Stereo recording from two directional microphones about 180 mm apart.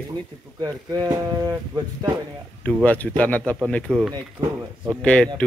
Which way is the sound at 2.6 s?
10° left (ahead or behind).